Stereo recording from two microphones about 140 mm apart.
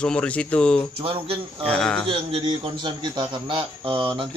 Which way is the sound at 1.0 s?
40° right (ahead or behind).